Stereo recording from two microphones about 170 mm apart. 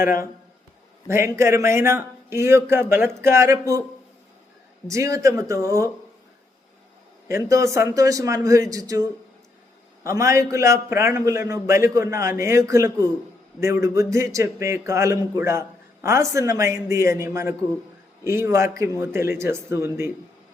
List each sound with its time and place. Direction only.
1.0 s speech: 15° right (ahead or behind)
4.9 s a man's voice: 20° right (ahead or behind)
7.3 s a man's voice: 20° right (ahead or behind)